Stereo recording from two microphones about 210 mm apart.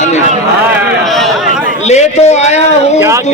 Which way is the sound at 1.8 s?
30° left (ahead or behind).